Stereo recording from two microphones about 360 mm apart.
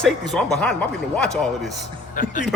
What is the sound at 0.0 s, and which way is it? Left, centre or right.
A man's voice, centre.